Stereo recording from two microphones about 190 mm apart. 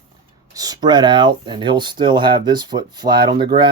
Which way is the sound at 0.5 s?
20° right (ahead or behind).